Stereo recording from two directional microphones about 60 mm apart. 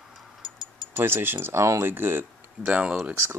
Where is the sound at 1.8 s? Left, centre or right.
Right.